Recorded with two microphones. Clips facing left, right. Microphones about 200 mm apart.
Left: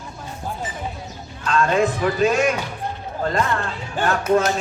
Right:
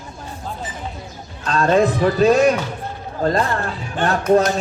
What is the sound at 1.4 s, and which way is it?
Speech, 35° right (ahead or behind).